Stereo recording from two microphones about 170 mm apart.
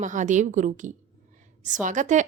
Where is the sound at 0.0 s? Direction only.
45° right (ahead or behind).